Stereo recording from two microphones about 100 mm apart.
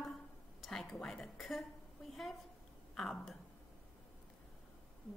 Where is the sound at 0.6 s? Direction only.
5° left (ahead or behind).